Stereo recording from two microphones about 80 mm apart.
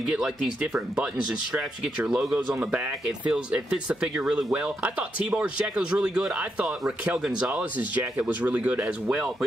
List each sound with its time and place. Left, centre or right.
0.0 s speech: centre
8.0 s speech: right